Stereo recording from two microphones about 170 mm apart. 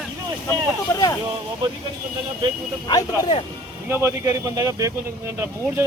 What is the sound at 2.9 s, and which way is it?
Speech, 25° left (ahead or behind).